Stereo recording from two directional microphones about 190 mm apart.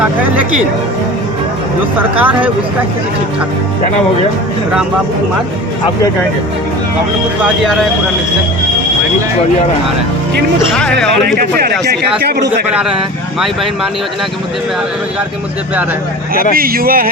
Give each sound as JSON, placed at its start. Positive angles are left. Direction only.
{"t": 2.0, "sound": "speech", "side_deg": -10}
{"t": 7.4, "sound": "speech", "side_deg": 0}
{"t": 11.3, "sound": "a man's voice", "side_deg": -50}
{"t": 16.6, "sound": "speech", "side_deg": -50}